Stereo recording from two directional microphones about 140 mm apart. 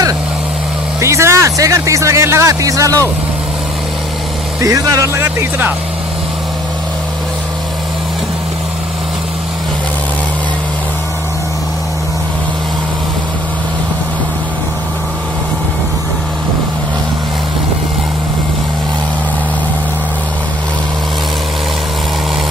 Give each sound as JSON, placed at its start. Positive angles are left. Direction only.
{"t": 1.0, "sound": "speech", "side_deg": -20}
{"t": 4.6, "sound": "speech", "side_deg": -25}